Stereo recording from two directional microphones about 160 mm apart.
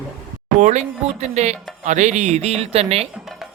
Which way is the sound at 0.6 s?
50° right (ahead or behind).